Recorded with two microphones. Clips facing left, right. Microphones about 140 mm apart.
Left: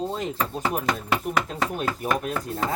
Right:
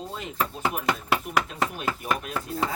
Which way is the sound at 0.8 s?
5° right (ahead or behind).